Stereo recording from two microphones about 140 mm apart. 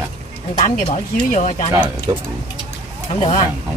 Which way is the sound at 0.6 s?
55° left (ahead or behind).